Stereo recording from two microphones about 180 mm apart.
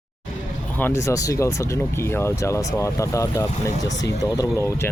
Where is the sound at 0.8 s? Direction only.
15° left (ahead or behind).